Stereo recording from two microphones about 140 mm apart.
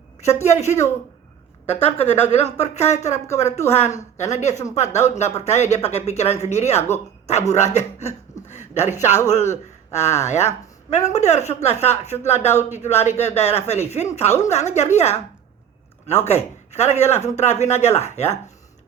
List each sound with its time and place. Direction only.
0.4 s a man's voice: 55° left (ahead or behind)
16.2 s a man's voice: 50° left (ahead or behind)